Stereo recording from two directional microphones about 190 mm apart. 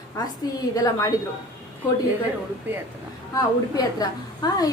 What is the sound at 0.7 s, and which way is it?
Speech, 20° left (ahead or behind).